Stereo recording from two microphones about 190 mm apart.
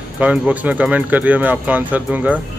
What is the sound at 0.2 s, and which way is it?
Speech, 5° right (ahead or behind).